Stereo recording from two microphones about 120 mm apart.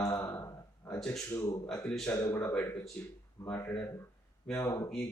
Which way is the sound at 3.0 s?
10° left (ahead or behind).